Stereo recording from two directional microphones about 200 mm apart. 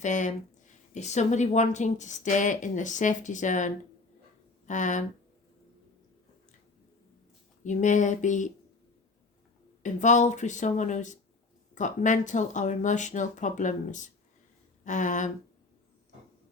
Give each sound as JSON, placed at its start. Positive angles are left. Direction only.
{"t": 0.0, "sound": "speech", "side_deg": 40}
{"t": 7.6, "sound": "speech", "side_deg": 40}
{"t": 9.8, "sound": "speech", "side_deg": 35}